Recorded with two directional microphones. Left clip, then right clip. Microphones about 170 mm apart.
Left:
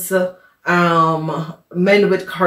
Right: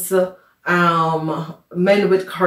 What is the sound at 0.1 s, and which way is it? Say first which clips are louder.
Speech: even; 55° left (ahead or behind).